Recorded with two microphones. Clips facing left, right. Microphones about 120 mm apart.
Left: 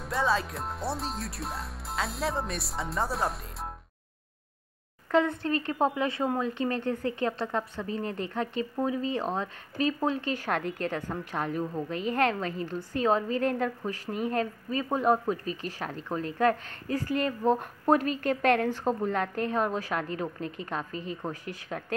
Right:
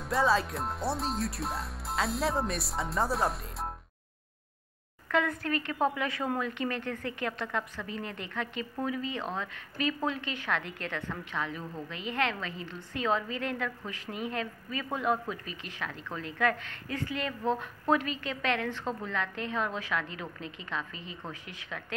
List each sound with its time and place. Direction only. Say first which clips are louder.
0.0 s speech: right 1 dB; centre (ahead or behind)
5.0 s a woman's voice: left 4 dB; 30° left (ahead or behind)